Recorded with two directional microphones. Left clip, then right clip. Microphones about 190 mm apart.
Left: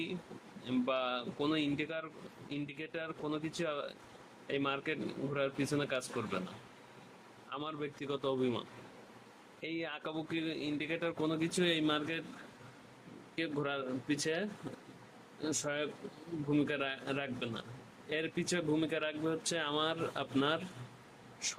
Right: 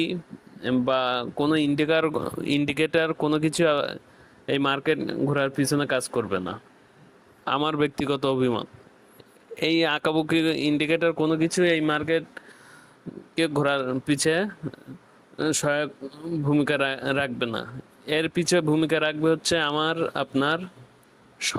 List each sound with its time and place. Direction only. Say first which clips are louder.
0.6 s speech: right 12 dB; 50° right (ahead or behind)
7.5 s speech: right 17 dB; 50° right (ahead or behind)
9.6 s speech: right 18 dB; 55° right (ahead or behind); by 12.2 s 40° right (ahead or behind)
13.3 s speech: right 14 dB; 50° right (ahead or behind)